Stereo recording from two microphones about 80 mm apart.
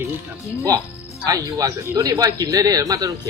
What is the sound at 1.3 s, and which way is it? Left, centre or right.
Speech, right.